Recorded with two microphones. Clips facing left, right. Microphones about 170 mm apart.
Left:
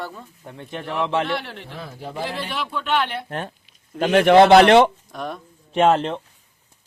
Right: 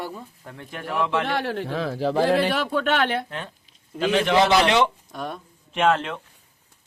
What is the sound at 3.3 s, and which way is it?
Speech, 50° left (ahead or behind).